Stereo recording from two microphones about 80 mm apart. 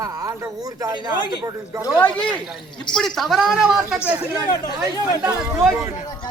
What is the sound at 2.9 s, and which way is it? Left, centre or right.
Speech, centre.